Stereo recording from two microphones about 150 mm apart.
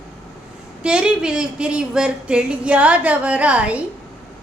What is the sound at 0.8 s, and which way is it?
Speech, 5° right (ahead or behind).